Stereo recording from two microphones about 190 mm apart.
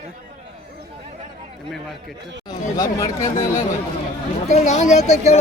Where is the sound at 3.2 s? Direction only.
45° left (ahead or behind).